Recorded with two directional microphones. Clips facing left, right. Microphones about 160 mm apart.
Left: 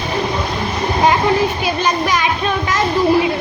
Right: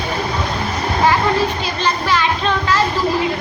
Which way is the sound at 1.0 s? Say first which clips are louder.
Left 2 dB; 15° left (ahead or behind).